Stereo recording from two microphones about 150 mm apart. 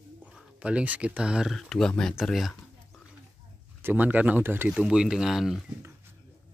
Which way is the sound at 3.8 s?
10° right (ahead or behind).